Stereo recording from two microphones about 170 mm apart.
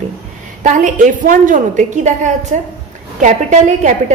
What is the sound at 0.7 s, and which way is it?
A woman's voice, 50° right (ahead or behind).